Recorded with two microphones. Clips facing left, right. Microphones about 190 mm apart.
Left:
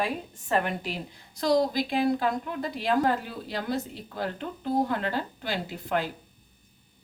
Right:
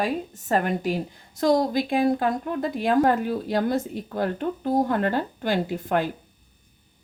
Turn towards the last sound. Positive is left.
turn(degrees=-50)  # may be behind; listen again after turning